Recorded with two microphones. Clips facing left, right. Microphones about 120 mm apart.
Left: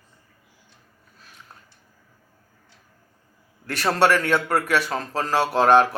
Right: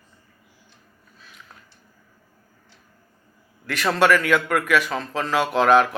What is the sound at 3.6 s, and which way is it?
A man's voice, 40° left (ahead or behind).